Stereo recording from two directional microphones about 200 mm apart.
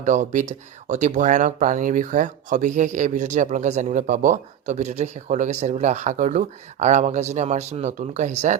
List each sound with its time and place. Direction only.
0.0 s speech: 40° right (ahead or behind)